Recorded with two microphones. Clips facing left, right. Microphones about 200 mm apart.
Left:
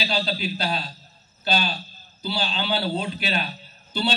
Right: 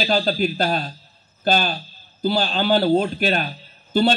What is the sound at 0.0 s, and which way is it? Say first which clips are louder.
A man's voice: right 7 dB; 50° right (ahead or behind).